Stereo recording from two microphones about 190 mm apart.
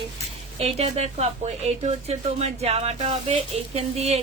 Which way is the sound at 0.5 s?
35° right (ahead or behind).